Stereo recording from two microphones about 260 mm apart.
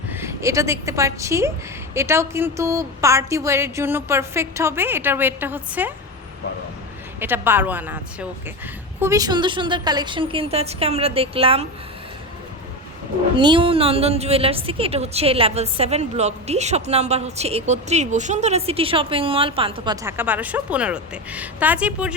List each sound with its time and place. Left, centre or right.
0.1 s a woman's voice: centre
7.2 s a woman's voice: centre
13.3 s a woman's voice: centre